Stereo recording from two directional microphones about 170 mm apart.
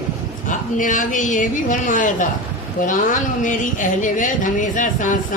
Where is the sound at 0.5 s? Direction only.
50° left (ahead or behind).